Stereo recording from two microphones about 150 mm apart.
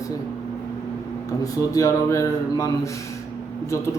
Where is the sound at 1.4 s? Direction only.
20° left (ahead or behind).